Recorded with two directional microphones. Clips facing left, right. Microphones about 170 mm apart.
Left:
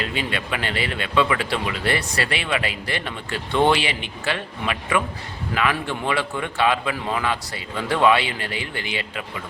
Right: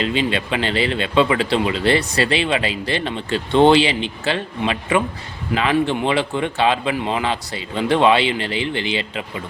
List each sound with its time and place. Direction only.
0.0 s speech: 25° right (ahead or behind)